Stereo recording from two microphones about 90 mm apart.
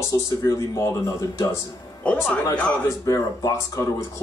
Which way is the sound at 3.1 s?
35° left (ahead or behind).